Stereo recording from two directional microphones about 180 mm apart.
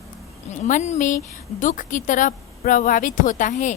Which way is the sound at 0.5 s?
40° left (ahead or behind).